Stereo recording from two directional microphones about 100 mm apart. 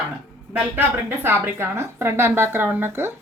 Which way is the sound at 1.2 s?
25° right (ahead or behind).